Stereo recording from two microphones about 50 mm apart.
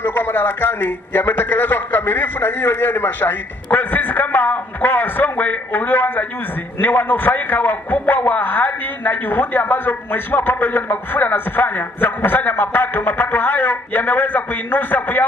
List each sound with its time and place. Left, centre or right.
0.0 s a man's voice: left